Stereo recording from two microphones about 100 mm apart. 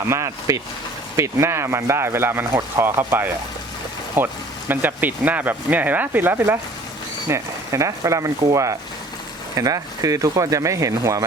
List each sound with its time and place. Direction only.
0.1 s speech: 30° right (ahead or behind)
9.6 s speech: 35° right (ahead or behind)